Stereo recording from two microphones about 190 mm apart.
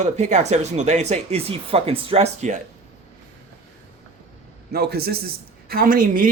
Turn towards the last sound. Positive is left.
turn(degrees=-45)  # may be behind; listen again after turning